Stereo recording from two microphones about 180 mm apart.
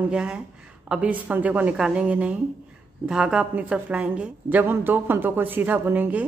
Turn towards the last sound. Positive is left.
turn(degrees=-10)  # may be behind; listen again after turning